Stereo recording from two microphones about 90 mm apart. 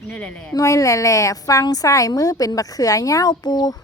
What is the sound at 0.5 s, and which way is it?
A woman's voice, 35° left (ahead or behind).